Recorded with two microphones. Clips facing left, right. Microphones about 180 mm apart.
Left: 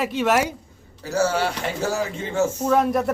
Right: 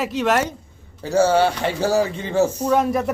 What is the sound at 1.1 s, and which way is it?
Speech, 30° right (ahead or behind).